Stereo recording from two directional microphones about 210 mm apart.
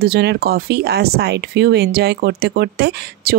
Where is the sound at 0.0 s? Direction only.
50° right (ahead or behind).